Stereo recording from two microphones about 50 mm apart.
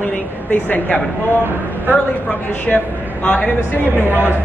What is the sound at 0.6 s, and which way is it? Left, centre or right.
Speech, left.